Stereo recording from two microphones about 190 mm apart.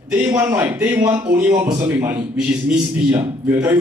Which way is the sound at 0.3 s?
10° right (ahead or behind).